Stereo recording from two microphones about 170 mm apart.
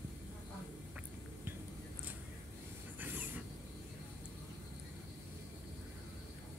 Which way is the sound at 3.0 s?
10° right (ahead or behind).